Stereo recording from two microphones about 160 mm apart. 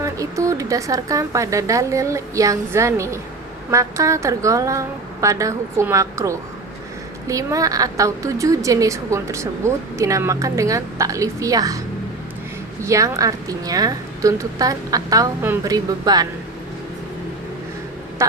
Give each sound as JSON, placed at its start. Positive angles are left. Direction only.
{"t": 0.0, "sound": "a woman's voice", "side_deg": -20}
{"t": 12.8, "sound": "a woman's voice", "side_deg": -20}
{"t": 18.2, "sound": "quack", "side_deg": -15}